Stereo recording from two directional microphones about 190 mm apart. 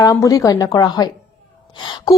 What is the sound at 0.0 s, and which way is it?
A woman's voice, 15° left (ahead or behind).